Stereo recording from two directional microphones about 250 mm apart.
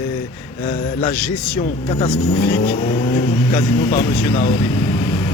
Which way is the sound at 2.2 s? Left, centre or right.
Left.